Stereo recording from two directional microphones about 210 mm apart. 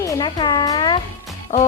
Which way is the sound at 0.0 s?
20° left (ahead or behind).